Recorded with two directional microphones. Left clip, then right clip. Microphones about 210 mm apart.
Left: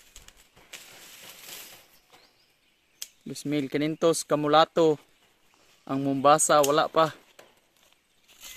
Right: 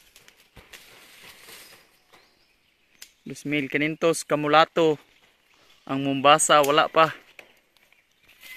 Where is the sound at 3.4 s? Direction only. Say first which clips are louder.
Right 3 dB; centre (ahead or behind).